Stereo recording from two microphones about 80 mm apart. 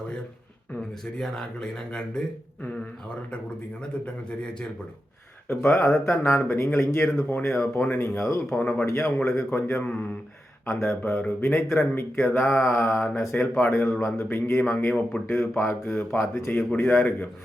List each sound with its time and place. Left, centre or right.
0.8 s speech: centre
5.5 s a man's voice: left